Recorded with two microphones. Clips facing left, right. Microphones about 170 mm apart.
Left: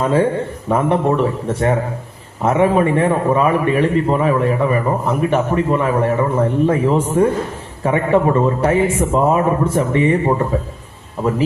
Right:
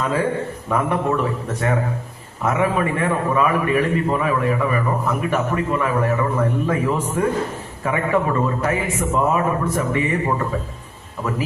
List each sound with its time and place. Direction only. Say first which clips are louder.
0.0 s a man's voice: left 5 dB; 30° left (ahead or behind)
2.4 s a man's voice: left 6 dB; 30° left (ahead or behind)